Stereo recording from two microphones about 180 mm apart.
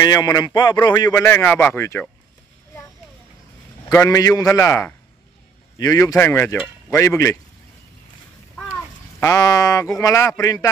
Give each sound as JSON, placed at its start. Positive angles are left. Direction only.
{"t": 0.0, "sound": "a man's voice", "side_deg": 20}
{"t": 3.9, "sound": "a man's voice", "side_deg": 20}
{"t": 9.2, "sound": "a man's voice", "side_deg": 20}